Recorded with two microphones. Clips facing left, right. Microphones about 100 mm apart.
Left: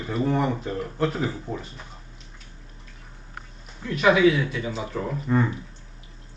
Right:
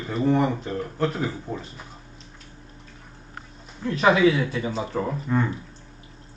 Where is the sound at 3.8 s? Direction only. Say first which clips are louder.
Even; 35° right (ahead or behind).